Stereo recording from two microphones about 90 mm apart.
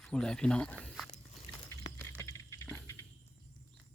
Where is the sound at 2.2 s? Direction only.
35° left (ahead or behind).